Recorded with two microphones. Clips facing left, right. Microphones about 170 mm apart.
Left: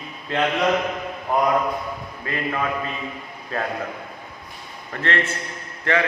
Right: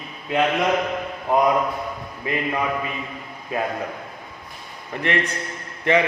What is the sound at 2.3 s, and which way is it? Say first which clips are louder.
Speech: right 3 dB; 20° right (ahead or behind).